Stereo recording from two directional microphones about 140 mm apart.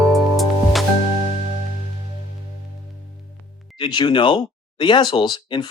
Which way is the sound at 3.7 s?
35° left (ahead or behind).